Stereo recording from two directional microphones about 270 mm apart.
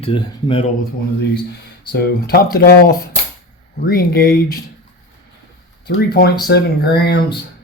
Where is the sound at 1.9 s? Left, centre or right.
Left.